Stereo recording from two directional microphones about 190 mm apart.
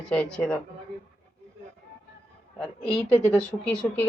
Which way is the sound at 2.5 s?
5° left (ahead or behind).